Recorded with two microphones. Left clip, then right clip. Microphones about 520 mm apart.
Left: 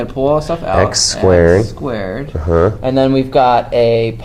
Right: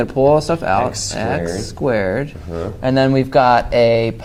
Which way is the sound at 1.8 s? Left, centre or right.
Right.